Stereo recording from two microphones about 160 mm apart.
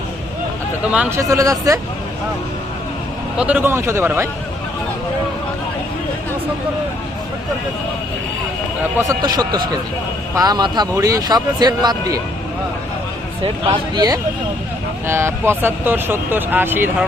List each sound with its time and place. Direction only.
0.9 s speech: 10° right (ahead or behind)
1.2 s speech: 20° right (ahead or behind)
3.3 s speech: 10° right (ahead or behind)
9.0 s speech: 20° right (ahead or behind)
13.4 s speech: 30° right (ahead or behind)
15.0 s speech: 15° right (ahead or behind)